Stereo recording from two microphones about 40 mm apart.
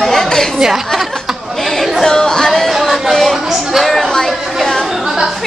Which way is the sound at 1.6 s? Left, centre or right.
Centre.